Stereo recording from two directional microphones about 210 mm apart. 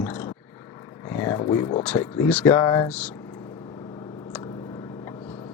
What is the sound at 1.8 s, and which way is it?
Speech, 10° left (ahead or behind).